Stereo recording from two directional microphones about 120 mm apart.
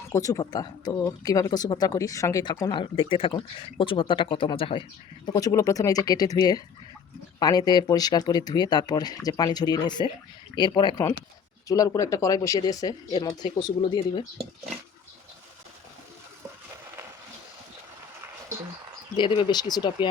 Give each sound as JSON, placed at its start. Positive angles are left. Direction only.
{"t": 0.1, "sound": "speech", "side_deg": 30}
{"t": 2.9, "sound": "speech", "side_deg": 45}
{"t": 19.1, "sound": "speech", "side_deg": 45}